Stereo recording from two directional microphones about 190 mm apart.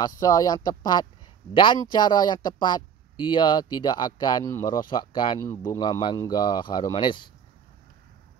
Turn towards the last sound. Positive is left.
turn(degrees=25)  # may be behind; listen again after turning